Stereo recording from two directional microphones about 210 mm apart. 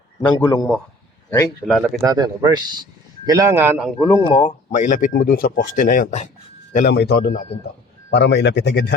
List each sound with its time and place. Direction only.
0.2 s a man's voice: 20° left (ahead or behind)
1.3 s speech: 10° left (ahead or behind)
1.7 s speech: centre (ahead or behind)
2.0 s speech: 20° right (ahead or behind)
3.9 s speech: 10° left (ahead or behind)
4.3 s speech: 35° left (ahead or behind)
6.7 s a man's voice: 50° left (ahead or behind)